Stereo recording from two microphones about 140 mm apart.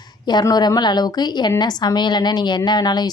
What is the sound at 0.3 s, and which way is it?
A woman's voice, 30° left (ahead or behind).